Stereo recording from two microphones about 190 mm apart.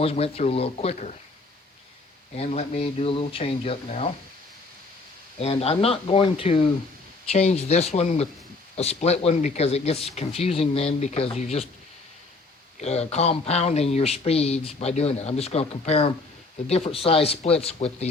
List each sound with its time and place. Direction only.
0.0 s speech: 30° left (ahead or behind)
2.3 s speech: 35° left (ahead or behind)
5.4 s speech: 35° left (ahead or behind)
12.8 s speech: 35° left (ahead or behind)